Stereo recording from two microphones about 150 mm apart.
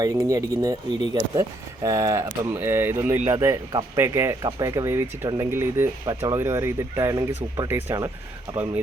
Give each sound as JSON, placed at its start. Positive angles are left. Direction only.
{"t": 0.0, "sound": "speech", "side_deg": -25}
{"t": 7.7, "sound": "speech", "side_deg": -15}